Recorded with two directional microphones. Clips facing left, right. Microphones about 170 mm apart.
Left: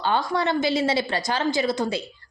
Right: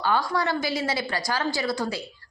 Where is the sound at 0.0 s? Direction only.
25° left (ahead or behind).